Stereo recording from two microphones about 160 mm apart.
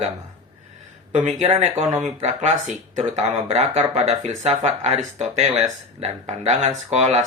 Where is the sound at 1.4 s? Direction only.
40° right (ahead or behind).